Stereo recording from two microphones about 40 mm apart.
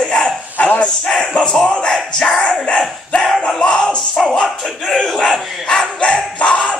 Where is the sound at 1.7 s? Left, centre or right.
Left.